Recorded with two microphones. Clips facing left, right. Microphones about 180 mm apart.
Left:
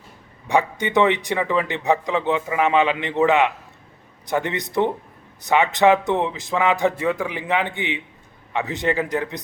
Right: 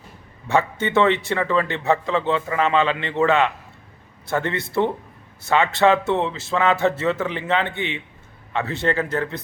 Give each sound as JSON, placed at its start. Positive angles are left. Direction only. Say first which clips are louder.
{"t": 0.4, "sound": "a man's voice", "louder": "even", "side_deg": 15}